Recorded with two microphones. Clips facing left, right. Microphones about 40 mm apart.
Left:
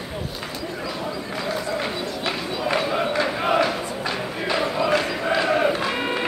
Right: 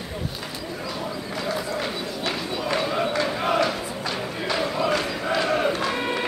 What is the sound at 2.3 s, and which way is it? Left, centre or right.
Run, centre.